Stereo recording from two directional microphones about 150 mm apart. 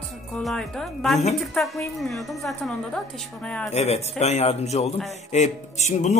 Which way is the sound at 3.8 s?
45° left (ahead or behind).